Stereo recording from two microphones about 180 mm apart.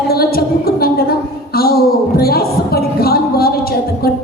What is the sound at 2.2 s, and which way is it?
Music, 55° left (ahead or behind).